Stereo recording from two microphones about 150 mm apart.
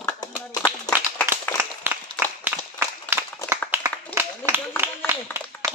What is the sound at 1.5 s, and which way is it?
Applause, 10° right (ahead or behind).